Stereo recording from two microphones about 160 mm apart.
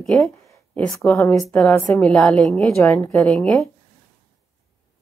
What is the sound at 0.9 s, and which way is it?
Speech, 20° left (ahead or behind).